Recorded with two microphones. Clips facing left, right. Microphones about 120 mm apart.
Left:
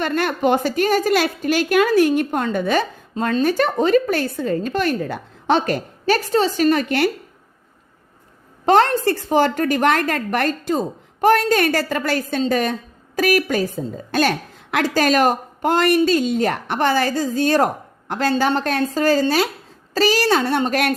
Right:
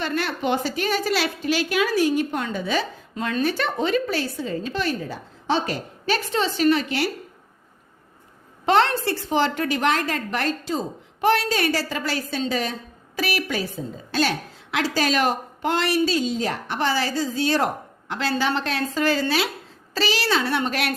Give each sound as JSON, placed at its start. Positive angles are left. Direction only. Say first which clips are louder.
{"t": 0.0, "sound": "a woman's voice", "louder": "left 6 dB", "side_deg": 50}
{"t": 8.6, "sound": "a woman's voice", "louder": "left 4 dB", "side_deg": 45}